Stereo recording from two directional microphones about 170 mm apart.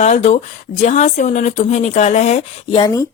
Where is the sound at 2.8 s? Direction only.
20° left (ahead or behind).